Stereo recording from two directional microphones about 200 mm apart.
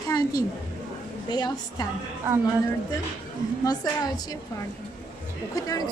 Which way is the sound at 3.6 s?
20° left (ahead or behind).